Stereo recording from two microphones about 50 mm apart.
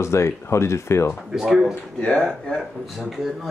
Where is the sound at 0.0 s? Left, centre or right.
Left.